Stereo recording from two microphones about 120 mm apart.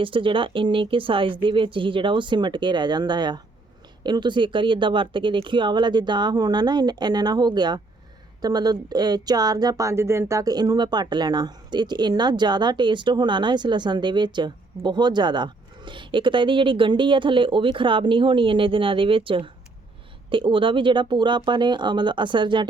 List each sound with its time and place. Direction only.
0.0 s speech: 45° right (ahead or behind)